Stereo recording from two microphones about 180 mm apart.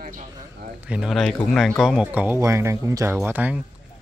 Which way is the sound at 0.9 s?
Centre (ahead or behind).